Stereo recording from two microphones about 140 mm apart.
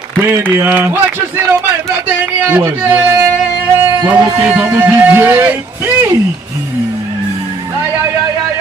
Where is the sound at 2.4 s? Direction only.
15° right (ahead or behind).